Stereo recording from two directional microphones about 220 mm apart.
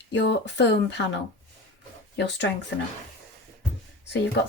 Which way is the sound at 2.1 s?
50° left (ahead or behind).